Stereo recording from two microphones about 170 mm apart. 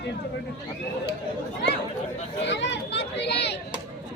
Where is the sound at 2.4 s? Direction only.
90° left.